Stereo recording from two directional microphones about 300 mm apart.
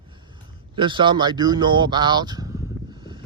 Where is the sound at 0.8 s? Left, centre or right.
Centre.